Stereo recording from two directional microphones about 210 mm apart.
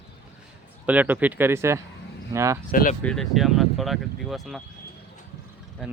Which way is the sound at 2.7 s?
45° left (ahead or behind).